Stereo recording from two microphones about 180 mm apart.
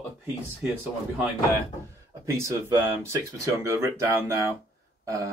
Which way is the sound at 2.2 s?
15° right (ahead or behind).